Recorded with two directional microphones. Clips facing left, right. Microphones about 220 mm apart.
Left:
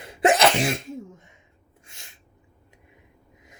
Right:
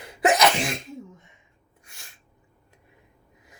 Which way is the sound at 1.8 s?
25° left (ahead or behind).